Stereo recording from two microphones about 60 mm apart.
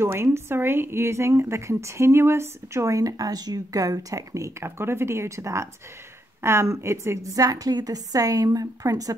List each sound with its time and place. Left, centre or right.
0.0 s a woman's voice: right